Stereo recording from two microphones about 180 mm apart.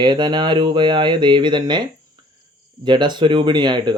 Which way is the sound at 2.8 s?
25° right (ahead or behind).